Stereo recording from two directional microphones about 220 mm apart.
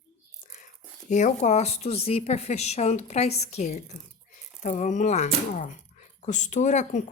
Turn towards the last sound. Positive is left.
turn(degrees=35)  # may be behind; listen again after turning